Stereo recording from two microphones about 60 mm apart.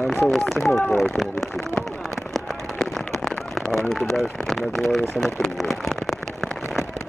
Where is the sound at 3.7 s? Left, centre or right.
Centre.